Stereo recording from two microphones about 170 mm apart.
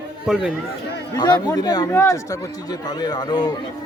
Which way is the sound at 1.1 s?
25° left (ahead or behind).